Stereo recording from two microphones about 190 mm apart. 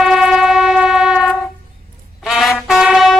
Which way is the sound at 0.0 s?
Centre (ahead or behind).